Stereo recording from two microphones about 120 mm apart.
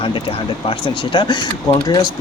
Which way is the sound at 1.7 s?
30° left (ahead or behind).